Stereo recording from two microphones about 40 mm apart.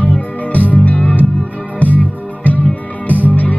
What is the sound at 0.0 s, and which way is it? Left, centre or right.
Music, left.